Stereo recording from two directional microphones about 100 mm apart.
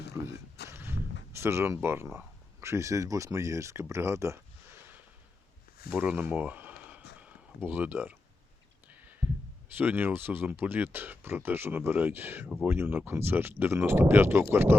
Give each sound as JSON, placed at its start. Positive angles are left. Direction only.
{"t": 0.7, "sound": "walk", "side_deg": -25}
{"t": 1.4, "sound": "speech", "side_deg": -25}
{"t": 5.9, "sound": "a sound", "side_deg": -20}
{"t": 9.7, "sound": "speech", "side_deg": -20}